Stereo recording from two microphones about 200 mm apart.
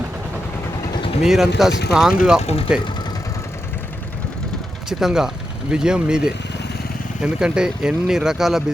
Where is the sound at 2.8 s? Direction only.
20° left (ahead or behind).